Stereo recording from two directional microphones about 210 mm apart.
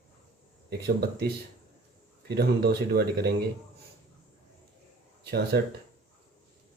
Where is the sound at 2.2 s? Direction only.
50° right (ahead or behind).